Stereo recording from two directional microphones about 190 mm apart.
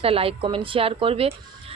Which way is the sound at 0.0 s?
30° right (ahead or behind).